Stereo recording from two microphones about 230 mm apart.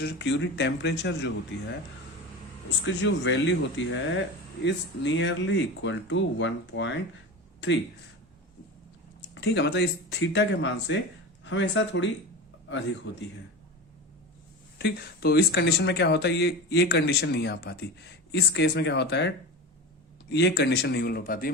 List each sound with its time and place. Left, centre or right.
0.0 s speech: left
9.3 s a man's voice: left
14.8 s speech: left
20.3 s speech: left